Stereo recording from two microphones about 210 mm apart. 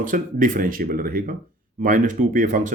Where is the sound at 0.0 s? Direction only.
40° right (ahead or behind).